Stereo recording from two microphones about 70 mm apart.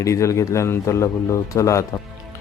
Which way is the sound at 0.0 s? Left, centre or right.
Left.